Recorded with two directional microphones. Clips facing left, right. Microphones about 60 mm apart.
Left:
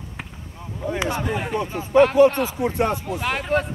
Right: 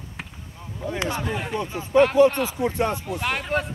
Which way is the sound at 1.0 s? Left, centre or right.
Centre.